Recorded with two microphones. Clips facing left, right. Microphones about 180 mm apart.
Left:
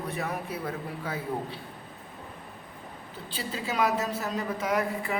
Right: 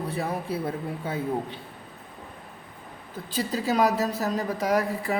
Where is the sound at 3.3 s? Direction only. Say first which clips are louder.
Right 7 dB; 40° right (ahead or behind).